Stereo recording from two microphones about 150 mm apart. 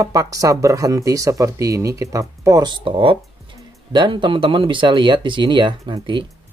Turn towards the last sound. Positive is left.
turn(degrees=-35)  # may be behind; listen again after turning